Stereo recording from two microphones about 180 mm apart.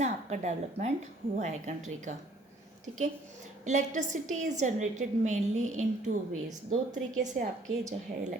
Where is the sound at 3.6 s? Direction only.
40° right (ahead or behind).